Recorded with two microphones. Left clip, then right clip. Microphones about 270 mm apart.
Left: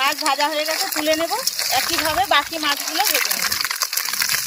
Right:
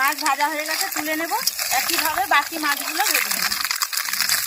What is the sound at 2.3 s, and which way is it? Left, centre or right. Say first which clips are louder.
Speech: left 1 dB; left.